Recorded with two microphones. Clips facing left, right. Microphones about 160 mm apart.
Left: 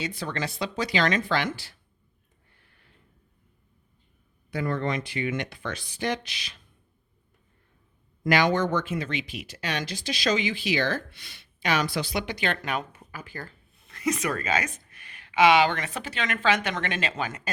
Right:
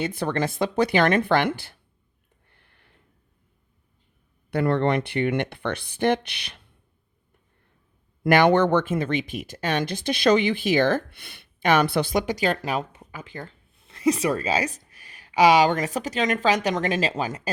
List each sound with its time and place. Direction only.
0.0 s speech: 55° right (ahead or behind)
2.5 s a sound: 60° right (ahead or behind)
4.5 s speech: 65° right (ahead or behind)
8.2 s speech: 60° right (ahead or behind); by 17.5 s 35° right (ahead or behind)